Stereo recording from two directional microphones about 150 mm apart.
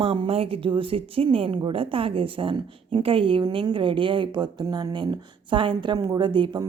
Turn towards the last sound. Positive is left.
turn(degrees=-30)  # may be behind; listen again after turning